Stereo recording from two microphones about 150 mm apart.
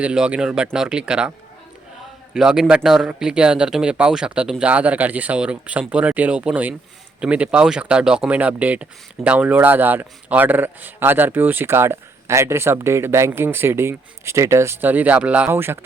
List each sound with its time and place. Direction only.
0.0 s speech: 5° right (ahead or behind)
2.3 s speech: 5° right (ahead or behind)